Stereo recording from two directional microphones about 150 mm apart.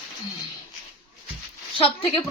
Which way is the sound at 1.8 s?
35° left (ahead or behind).